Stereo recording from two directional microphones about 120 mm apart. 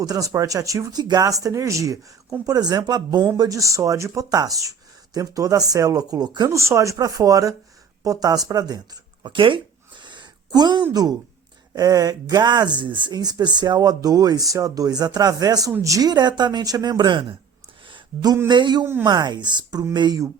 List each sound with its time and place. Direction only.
0.0 s speech: 30° right (ahead or behind)
9.2 s speech: 45° right (ahead or behind)
10.0 s a sound: 40° right (ahead or behind)
11.7 s speech: 30° right (ahead or behind)
17.8 s a sound: 40° right (ahead or behind)
18.4 s speech: 40° right (ahead or behind)